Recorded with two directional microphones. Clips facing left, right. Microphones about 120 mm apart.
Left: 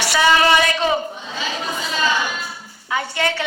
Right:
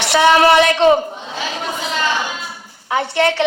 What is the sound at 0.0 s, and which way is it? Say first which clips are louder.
Speech: right 4 dB; 65° right (ahead or behind).